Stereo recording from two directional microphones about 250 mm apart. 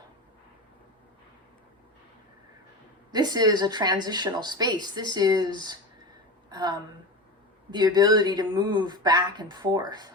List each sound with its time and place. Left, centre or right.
3.1 s a woman's voice: centre